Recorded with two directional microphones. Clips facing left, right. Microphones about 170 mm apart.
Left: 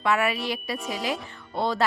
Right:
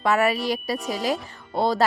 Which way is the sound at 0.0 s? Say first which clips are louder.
Right 3 dB; 40° right (ahead or behind).